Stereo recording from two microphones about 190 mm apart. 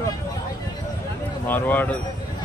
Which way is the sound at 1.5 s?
10° left (ahead or behind).